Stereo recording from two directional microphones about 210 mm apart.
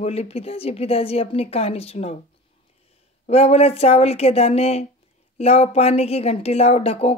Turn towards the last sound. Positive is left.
turn(degrees=30)  # may be behind; listen again after turning